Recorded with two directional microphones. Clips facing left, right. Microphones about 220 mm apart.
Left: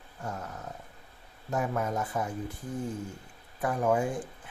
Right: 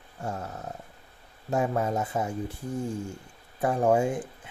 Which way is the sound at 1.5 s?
30° right (ahead or behind).